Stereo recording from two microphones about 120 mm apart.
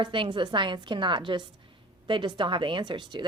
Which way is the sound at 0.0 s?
45° right (ahead or behind).